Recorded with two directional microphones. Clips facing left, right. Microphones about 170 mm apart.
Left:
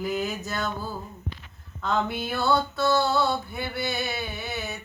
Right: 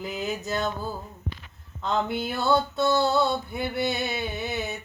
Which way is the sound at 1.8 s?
20° right (ahead or behind).